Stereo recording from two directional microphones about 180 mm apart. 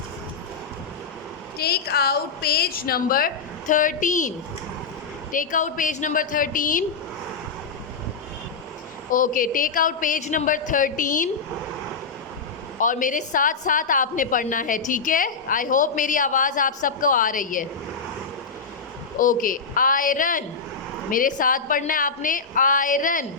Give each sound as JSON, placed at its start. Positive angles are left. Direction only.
{"t": 1.5, "sound": "a woman's voice", "side_deg": 60}
{"t": 5.3, "sound": "a woman's voice", "side_deg": 45}
{"t": 9.1, "sound": "a woman's voice", "side_deg": 50}
{"t": 12.8, "sound": "a woman's voice", "side_deg": 45}
{"t": 19.2, "sound": "a woman's voice", "side_deg": 50}